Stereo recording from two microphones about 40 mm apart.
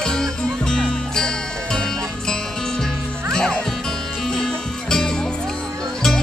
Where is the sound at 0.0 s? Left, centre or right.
Centre.